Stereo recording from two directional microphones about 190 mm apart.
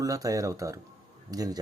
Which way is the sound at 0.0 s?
20° right (ahead or behind).